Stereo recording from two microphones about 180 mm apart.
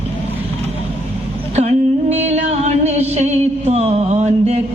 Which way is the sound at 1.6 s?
35° right (ahead or behind).